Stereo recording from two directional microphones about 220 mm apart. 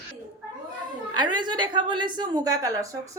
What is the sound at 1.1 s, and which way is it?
A woman's voice, 20° right (ahead or behind).